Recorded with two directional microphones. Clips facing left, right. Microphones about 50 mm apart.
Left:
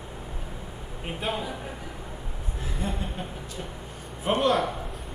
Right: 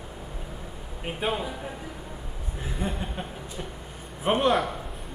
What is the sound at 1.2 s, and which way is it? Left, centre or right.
Speech, centre.